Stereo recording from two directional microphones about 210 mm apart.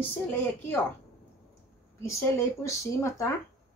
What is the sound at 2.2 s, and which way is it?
Speech, 15° left (ahead or behind).